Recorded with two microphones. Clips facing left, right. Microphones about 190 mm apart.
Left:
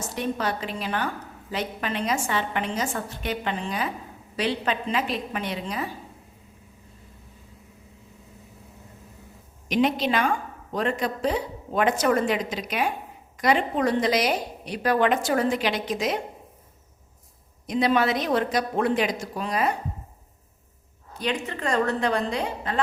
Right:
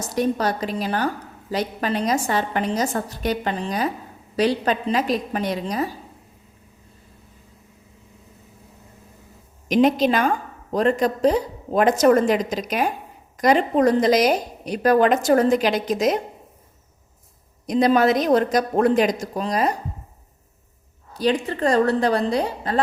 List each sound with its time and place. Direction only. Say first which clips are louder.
0.0 s a woman's voice: right 6 dB; 40° right (ahead or behind)
9.6 s a woman's voice: right 6 dB; 45° right (ahead or behind)
17.7 s a woman's voice: right 5 dB; 40° right (ahead or behind)
21.1 s a woman's voice: right 7 dB; 35° right (ahead or behind)